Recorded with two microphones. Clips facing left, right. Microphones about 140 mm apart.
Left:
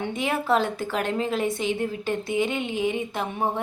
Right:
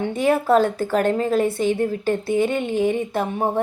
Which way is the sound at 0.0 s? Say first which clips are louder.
Right 7 dB; 40° right (ahead or behind).